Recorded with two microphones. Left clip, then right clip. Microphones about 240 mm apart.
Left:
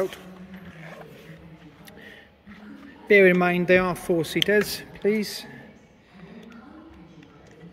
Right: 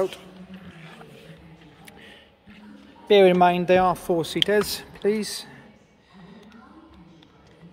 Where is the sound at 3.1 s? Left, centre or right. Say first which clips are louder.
Right 1 dB; centre.